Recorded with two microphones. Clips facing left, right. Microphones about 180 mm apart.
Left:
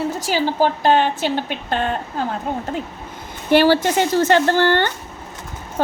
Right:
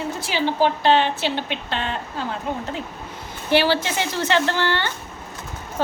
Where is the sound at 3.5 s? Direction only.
50° left (ahead or behind).